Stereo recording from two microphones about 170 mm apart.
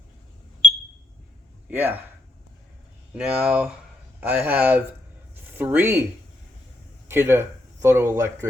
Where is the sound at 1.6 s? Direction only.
10° right (ahead or behind).